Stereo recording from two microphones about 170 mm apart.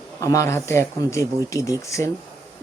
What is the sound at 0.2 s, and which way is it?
Speech, 15° left (ahead or behind).